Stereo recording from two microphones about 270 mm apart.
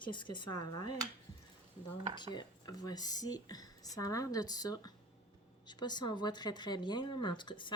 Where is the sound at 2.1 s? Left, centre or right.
Centre.